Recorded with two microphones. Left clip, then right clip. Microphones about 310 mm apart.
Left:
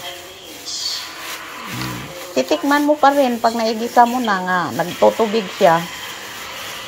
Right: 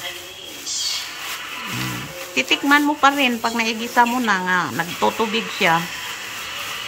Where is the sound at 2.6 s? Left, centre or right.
Centre.